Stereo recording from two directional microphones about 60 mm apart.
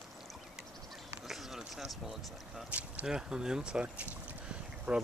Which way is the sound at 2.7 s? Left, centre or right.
Right.